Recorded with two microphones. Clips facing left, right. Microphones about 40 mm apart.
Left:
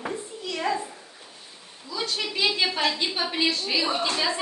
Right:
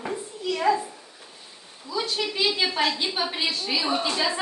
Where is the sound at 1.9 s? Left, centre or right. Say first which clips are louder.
Right 2 dB; centre.